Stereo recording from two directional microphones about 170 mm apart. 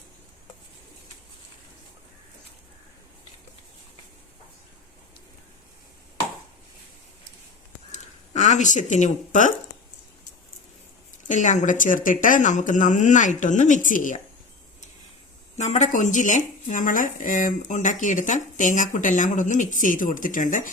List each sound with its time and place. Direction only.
7.9 s a sound: 45° left (ahead or behind)
11.3 s speech: 45° left (ahead or behind)
15.5 s speech: 45° left (ahead or behind)